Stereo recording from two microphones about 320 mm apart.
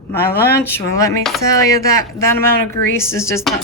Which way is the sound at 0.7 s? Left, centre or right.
Centre.